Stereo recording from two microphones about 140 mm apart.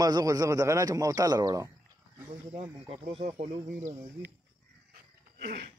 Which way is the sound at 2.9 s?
45° right (ahead or behind).